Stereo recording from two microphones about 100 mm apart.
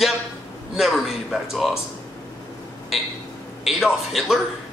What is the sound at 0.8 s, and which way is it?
Speech, centre (ahead or behind).